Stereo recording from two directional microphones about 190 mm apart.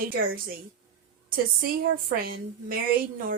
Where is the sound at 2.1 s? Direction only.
50° right (ahead or behind).